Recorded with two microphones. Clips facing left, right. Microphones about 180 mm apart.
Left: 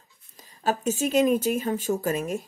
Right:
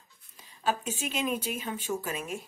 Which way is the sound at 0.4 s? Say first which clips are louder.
Left 4 dB; 45° left (ahead or behind).